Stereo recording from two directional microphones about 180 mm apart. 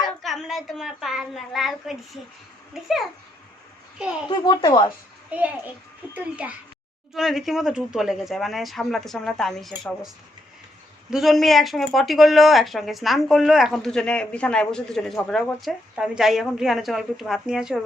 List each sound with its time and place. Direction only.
0.0 s a woman's voice: centre (ahead or behind)
4.3 s speech: 25° left (ahead or behind)
5.3 s a child's voice: 10° right (ahead or behind)
11.1 s speech: centre (ahead or behind)